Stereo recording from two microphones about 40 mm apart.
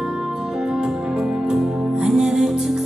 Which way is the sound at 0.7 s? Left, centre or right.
Centre.